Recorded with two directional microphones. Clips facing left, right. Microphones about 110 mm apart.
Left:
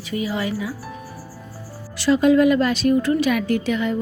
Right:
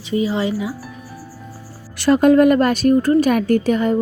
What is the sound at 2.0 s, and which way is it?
Speech, 55° right (ahead or behind).